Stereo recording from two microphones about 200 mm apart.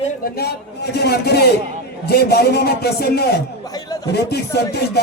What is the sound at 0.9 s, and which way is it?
A man's voice, 55° left (ahead or behind).